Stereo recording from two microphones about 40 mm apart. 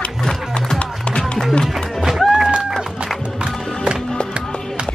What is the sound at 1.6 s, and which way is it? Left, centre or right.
Music, centre.